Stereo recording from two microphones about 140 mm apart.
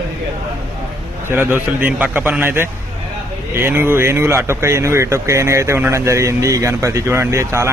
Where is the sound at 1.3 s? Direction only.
15° right (ahead or behind).